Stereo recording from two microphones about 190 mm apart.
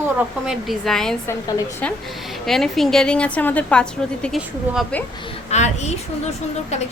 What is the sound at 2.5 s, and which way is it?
A woman's voice, centre (ahead or behind).